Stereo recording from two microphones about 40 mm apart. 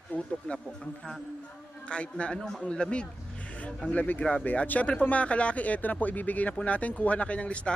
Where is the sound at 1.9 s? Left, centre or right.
Left.